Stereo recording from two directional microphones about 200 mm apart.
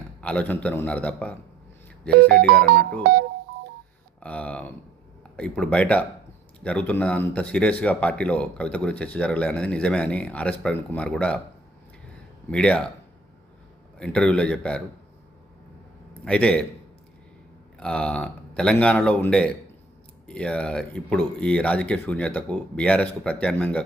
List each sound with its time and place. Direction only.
0.2 s speech: 5° left (ahead or behind)
2.0 s music: 50° right (ahead or behind)
4.2 s speech: 5° left (ahead or behind)
12.5 s speech: 5° left (ahead or behind)
14.0 s speech: 5° left (ahead or behind)
16.2 s speech: 5° left (ahead or behind)
17.7 s speech: 5° left (ahead or behind)